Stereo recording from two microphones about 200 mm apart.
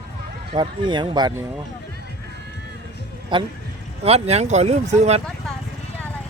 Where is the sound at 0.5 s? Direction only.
25° right (ahead or behind).